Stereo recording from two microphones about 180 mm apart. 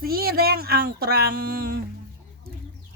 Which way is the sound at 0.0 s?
55° right (ahead or behind).